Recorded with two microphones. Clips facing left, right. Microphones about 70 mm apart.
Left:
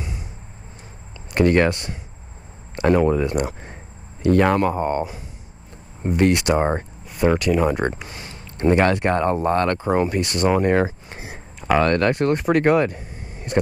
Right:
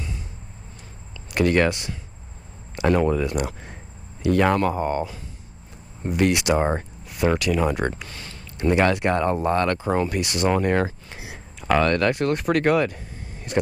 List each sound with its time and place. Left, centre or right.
1.3 s speech: centre
1.7 s speech: centre
4.2 s speech: centre
6.1 s speech: centre
7.9 s speech: centre
8.7 s speech: centre
10.6 s speech: centre